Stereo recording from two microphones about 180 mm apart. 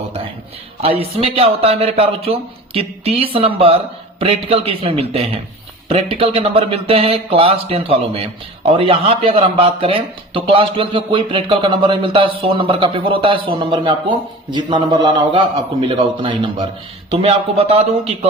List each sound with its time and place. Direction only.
0.8 s speech: 30° right (ahead or behind)